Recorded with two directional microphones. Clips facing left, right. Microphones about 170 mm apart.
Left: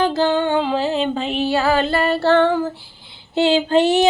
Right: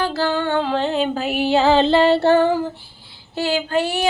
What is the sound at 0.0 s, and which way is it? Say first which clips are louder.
Music: left 3 dB; 20° left (ahead or behind).